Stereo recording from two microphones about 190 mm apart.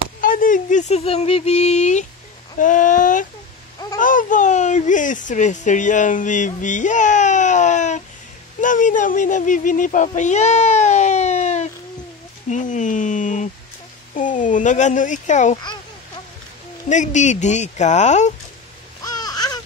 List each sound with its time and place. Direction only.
0.2 s speech: 45° left (ahead or behind)
15.5 s a child's voice: 25° left (ahead or behind)
16.9 s speech: 40° left (ahead or behind)
19.0 s a sound: 20° left (ahead or behind)